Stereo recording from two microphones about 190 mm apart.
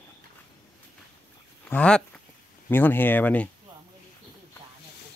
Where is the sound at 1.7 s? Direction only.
5° left (ahead or behind).